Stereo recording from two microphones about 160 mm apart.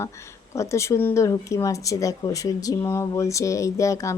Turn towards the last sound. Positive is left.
turn(degrees=20)  # may be behind; listen again after turning